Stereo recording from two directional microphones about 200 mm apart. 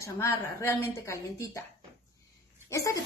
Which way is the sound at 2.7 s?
15° left (ahead or behind).